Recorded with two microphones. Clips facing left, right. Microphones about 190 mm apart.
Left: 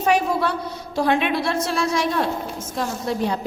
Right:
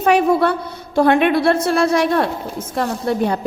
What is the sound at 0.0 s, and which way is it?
A woman's voice, 60° right (ahead or behind).